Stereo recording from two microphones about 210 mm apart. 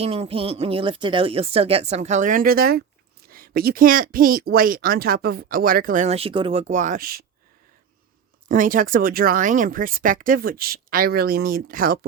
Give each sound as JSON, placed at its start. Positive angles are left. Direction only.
{"t": 0.0, "sound": "speech", "side_deg": -30}
{"t": 8.4, "sound": "speech", "side_deg": -40}